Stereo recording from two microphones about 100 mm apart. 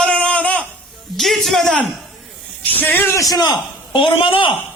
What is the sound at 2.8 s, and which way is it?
Speech, 20° left (ahead or behind).